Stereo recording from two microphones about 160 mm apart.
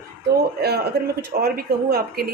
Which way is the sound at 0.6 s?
85° right.